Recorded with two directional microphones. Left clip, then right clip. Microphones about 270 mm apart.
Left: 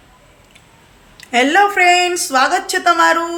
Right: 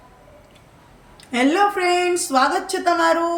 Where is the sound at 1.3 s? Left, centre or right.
Centre.